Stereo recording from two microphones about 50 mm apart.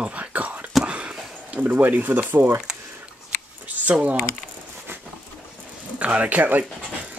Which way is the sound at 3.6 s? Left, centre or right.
Right.